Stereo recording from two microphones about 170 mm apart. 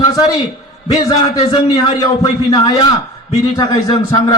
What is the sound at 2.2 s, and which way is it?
Speech, 20° left (ahead or behind).